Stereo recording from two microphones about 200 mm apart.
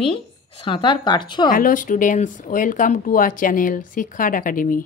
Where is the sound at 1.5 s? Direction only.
45° left (ahead or behind).